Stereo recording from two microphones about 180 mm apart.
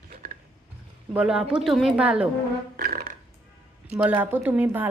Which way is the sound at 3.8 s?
10° right (ahead or behind).